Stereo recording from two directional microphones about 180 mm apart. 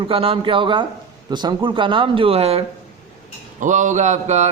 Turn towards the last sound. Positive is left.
turn(degrees=-40)  # may be behind; listen again after turning